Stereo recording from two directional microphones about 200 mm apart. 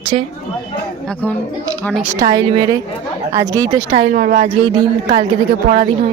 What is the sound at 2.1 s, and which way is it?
A woman's voice, 20° right (ahead or behind).